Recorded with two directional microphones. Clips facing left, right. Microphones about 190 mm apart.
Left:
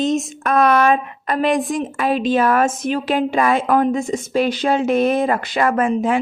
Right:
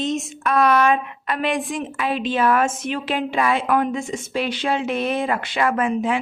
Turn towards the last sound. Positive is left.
turn(degrees=45)  # may be behind; listen again after turning